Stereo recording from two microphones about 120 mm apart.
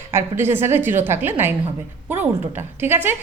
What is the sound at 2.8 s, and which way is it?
Speech, 20° right (ahead or behind).